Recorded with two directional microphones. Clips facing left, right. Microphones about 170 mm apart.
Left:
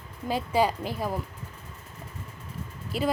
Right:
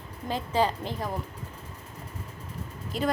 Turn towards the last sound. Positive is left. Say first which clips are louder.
# left 1 dB
turn(degrees=5)  # may be behind; listen again after turning